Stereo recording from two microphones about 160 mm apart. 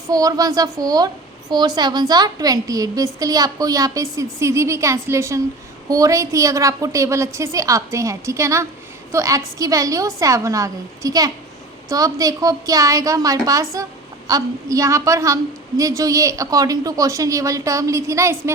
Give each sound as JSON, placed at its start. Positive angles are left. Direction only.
{"t": 0.1, "sound": "a woman's voice", "side_deg": -20}